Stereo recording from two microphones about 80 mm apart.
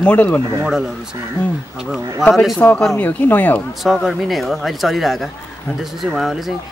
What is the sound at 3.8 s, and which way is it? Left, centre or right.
Speech, centre.